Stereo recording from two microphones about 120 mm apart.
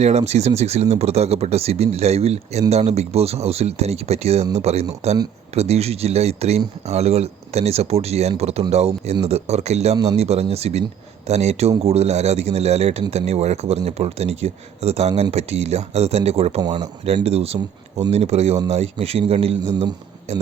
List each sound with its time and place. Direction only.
0.0 s speech: 65° right (ahead or behind)
16.6 s speech: 35° right (ahead or behind)
17.2 s speech: 60° right (ahead or behind)